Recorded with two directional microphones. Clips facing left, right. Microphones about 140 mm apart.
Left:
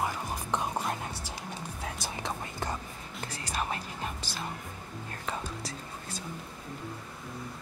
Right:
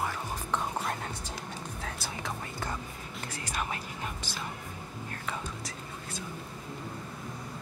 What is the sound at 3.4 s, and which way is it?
Music, 35° left (ahead or behind).